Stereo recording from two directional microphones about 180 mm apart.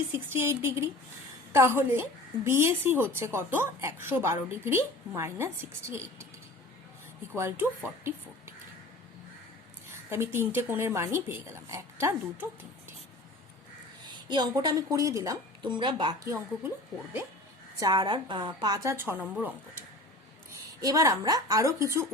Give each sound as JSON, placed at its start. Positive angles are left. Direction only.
{"t": 0.1, "sound": "a woman's voice", "side_deg": -15}
{"t": 7.3, "sound": "a woman's voice", "side_deg": -15}
{"t": 10.1, "sound": "a woman's voice", "side_deg": -15}
{"t": 14.0, "sound": "a woman's voice", "side_deg": -25}
{"t": 17.7, "sound": "a woman's voice", "side_deg": -20}